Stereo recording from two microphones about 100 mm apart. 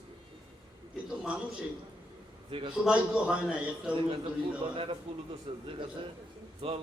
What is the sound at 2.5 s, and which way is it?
Speech, 65° right (ahead or behind).